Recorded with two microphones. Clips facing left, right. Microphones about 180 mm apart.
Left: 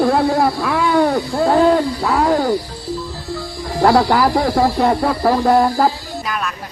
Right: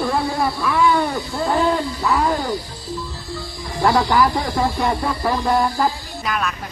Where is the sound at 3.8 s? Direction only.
55° left (ahead or behind).